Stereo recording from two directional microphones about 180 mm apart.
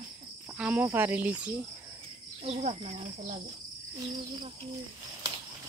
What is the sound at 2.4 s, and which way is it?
Speech, 35° right (ahead or behind).